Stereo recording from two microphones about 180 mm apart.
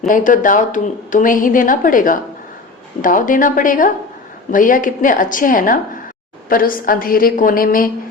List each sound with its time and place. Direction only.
0.1 s a woman's voice: 45° left (ahead or behind)